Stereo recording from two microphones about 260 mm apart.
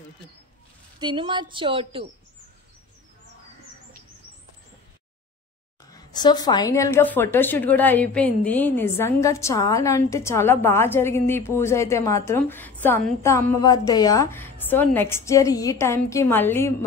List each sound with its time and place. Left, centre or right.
0.9 s a woman's voice: centre
5.9 s a woman's voice: centre